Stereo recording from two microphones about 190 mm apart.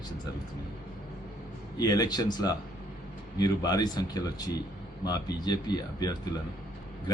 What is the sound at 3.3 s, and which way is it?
A man's voice, 20° left (ahead or behind).